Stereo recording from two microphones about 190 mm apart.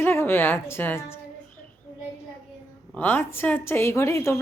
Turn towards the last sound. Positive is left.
turn(degrees=15)  # may be behind; listen again after turning